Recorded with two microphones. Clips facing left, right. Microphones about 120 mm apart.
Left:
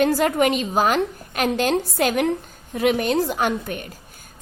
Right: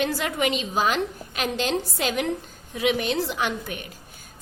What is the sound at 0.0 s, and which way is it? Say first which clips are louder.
A woman's voice: left 7 dB; 45° left (ahead or behind).